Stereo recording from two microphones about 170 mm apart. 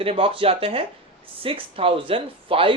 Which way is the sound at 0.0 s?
35° right (ahead or behind).